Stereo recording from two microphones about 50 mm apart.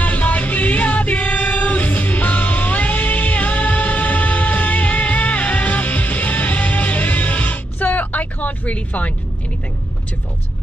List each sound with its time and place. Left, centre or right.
0.0 s music: left